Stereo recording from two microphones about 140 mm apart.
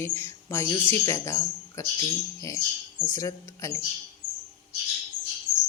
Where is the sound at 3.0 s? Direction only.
20° left (ahead or behind).